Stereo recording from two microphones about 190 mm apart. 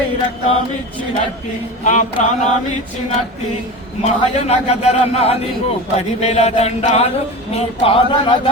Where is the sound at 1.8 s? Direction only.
40° left (ahead or behind).